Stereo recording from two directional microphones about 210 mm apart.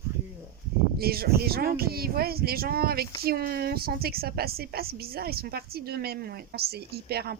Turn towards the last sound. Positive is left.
turn(degrees=-50)  # may be behind; listen again after turning